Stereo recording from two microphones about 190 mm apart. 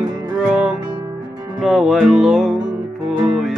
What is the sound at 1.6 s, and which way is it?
Music, centre (ahead or behind).